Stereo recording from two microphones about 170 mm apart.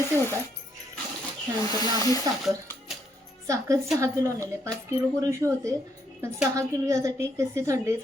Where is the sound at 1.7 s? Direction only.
20° left (ahead or behind).